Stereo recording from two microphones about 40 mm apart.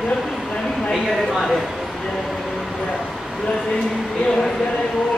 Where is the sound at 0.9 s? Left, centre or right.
Centre.